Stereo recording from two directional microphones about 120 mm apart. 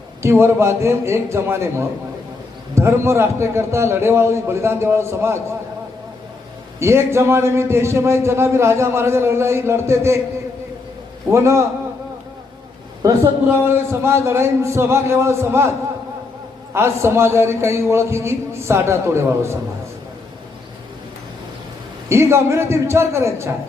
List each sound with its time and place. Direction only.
0.2 s a man's voice: 20° right (ahead or behind)
6.7 s a man's voice: 25° right (ahead or behind)
11.3 s a man's voice: 25° right (ahead or behind)
13.0 s a man's voice: 25° right (ahead or behind)
16.7 s a man's voice: 20° right (ahead or behind)
22.1 s a man's voice: 20° right (ahead or behind)